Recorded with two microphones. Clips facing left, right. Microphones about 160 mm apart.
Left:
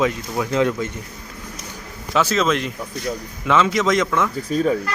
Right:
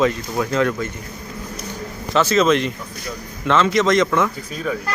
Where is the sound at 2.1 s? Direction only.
5° left (ahead or behind).